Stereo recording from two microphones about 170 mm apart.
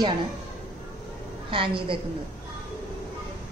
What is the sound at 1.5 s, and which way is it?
Speech, 30° right (ahead or behind).